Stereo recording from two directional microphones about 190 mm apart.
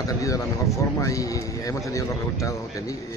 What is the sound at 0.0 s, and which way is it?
Speech, 15° left (ahead or behind).